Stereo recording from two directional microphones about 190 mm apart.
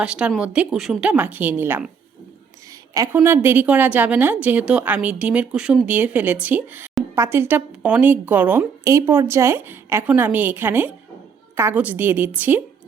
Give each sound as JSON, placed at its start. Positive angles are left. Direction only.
{"t": 0.0, "sound": "a woman's voice", "side_deg": -5}
{"t": 2.9, "sound": "a woman's voice", "side_deg": -20}